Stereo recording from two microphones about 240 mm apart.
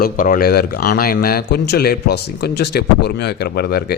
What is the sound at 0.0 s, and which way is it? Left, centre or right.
Speech, left.